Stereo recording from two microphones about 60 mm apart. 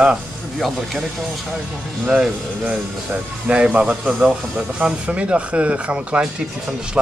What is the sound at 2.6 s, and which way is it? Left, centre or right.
Speech, right.